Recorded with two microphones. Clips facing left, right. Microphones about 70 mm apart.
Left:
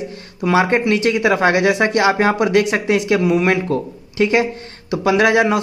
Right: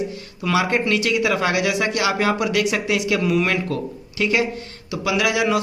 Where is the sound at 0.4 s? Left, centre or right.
Left.